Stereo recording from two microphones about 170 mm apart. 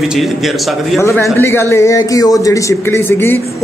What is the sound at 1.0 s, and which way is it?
A man's voice, 15° left (ahead or behind).